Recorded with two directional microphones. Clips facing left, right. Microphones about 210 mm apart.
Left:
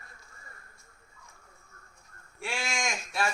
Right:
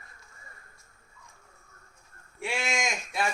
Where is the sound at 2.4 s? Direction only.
20° right (ahead or behind).